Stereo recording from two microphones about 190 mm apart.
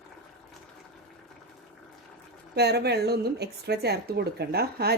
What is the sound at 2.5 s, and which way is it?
Speech, 60° right (ahead or behind).